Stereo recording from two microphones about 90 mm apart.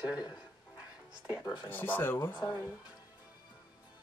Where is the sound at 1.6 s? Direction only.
20° left (ahead or behind).